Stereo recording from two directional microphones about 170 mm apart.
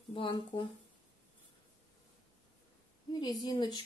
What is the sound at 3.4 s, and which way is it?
Speech, 25° left (ahead or behind).